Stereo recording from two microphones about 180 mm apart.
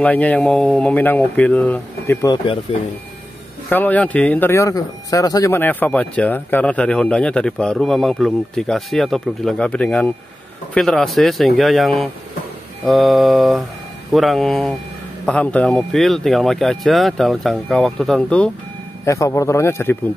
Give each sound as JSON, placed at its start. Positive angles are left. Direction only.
{"t": 0.0, "sound": "speech", "side_deg": 10}
{"t": 2.2, "sound": "speech", "side_deg": 30}
{"t": 3.6, "sound": "speech", "side_deg": 10}
{"t": 19.0, "sound": "speech", "side_deg": 15}